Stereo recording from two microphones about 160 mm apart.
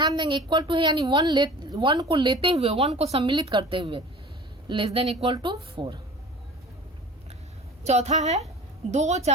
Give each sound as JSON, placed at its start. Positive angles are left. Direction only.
{"t": 0.0, "sound": "a woman's voice", "side_deg": -25}
{"t": 7.9, "sound": "a woman's voice", "side_deg": -45}